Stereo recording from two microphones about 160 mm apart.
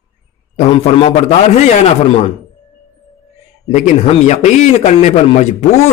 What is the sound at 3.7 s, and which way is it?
Speech, 45° left (ahead or behind).